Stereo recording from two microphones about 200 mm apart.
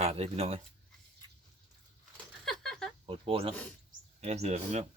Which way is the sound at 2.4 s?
Centre (ahead or behind).